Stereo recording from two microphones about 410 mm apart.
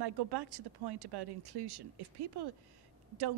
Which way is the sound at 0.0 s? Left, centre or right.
Right.